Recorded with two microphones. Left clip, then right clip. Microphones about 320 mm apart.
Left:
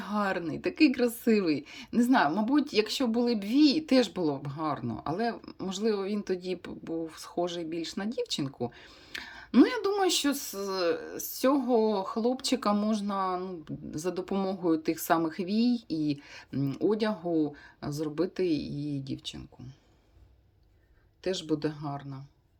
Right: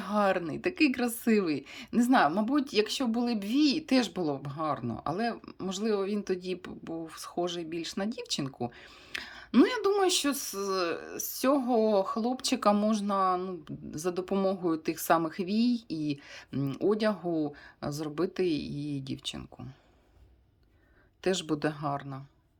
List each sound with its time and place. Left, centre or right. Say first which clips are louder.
0.0 s speech: right 3 dB; centre
21.2 s speech: right 1 dB; centre